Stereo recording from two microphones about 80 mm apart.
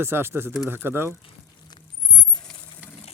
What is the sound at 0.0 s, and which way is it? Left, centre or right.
Speech, right.